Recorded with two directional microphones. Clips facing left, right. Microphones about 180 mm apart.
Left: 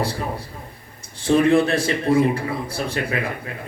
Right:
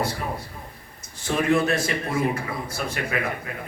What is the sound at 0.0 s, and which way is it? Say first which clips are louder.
A man's voice: left 2 dB; 30° left (ahead or behind).